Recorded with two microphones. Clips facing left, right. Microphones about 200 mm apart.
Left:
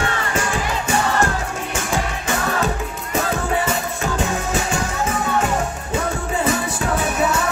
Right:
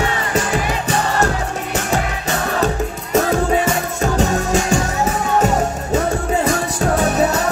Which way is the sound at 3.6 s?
40° right (ahead or behind).